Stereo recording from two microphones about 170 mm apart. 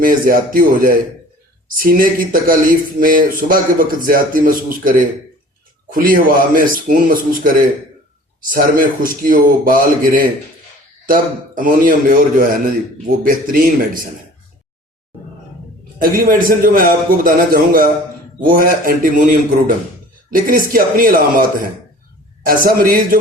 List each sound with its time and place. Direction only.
0.0 s speech: 55° right (ahead or behind)
16.0 s speech: 55° right (ahead or behind)
20.3 s speech: 55° right (ahead or behind)
22.4 s speech: 60° right (ahead or behind)